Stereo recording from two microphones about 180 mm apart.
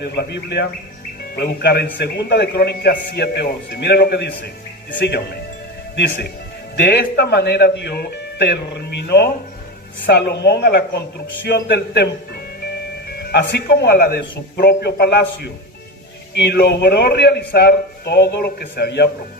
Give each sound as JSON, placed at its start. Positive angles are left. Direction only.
{"t": 0.0, "sound": "a man's voice", "side_deg": 65}
{"t": 13.1, "sound": "a man's voice", "side_deg": 65}